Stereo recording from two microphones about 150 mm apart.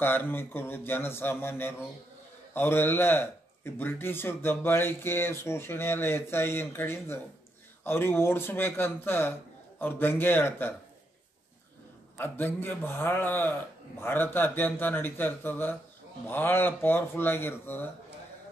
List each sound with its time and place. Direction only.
0.0 s a man's voice: 15° left (ahead or behind)
12.2 s a man's voice: 15° left (ahead or behind)